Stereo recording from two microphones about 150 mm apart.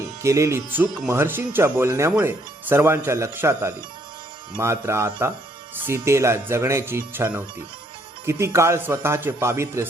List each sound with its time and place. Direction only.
0.2 s speech: 20° right (ahead or behind)